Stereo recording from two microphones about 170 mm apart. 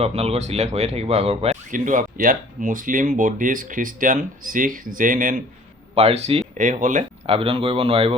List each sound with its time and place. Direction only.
0.0 s speech: 35° right (ahead or behind)
1.7 s speech: 50° right (ahead or behind)
5.9 s speech: 35° right (ahead or behind)
6.6 s speech: 50° right (ahead or behind)
7.3 s speech: 35° right (ahead or behind)